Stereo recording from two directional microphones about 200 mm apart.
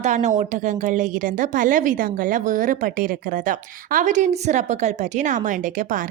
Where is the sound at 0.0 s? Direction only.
35° right (ahead or behind).